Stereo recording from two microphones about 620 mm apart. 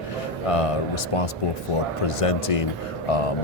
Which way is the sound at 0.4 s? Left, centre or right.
Left.